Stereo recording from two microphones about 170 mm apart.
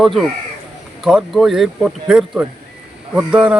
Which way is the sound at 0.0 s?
Centre (ahead or behind).